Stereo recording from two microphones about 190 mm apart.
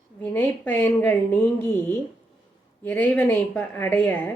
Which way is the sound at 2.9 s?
10° left (ahead or behind).